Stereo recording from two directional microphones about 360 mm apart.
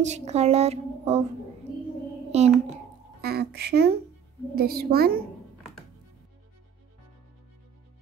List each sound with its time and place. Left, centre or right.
0.0 s a woman's voice: centre
2.3 s a sound: centre
3.2 s a child's voice: right